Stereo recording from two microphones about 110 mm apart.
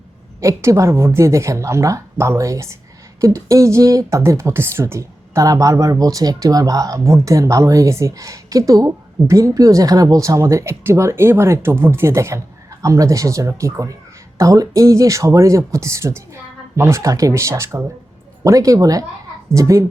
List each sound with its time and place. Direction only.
0.3 s speech: 30° right (ahead or behind)